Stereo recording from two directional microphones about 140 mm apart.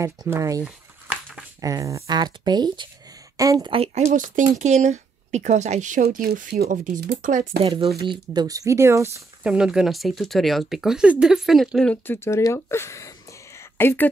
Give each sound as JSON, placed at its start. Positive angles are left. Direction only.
{"t": 0.0, "sound": "speech", "side_deg": -20}
{"t": 0.7, "sound": "a sound", "side_deg": -5}
{"t": 1.6, "sound": "speech", "side_deg": -25}
{"t": 7.6, "sound": "speech", "side_deg": -40}
{"t": 9.4, "sound": "speech", "side_deg": -5}
{"t": 11.9, "sound": "speech", "side_deg": 15}
{"t": 13.6, "sound": "a sound", "side_deg": 15}